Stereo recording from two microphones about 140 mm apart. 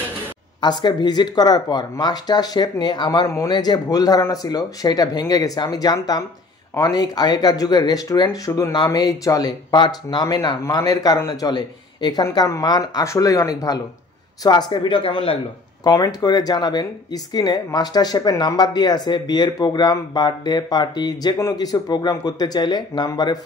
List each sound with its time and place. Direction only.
0.6 s speech: 30° left (ahead or behind)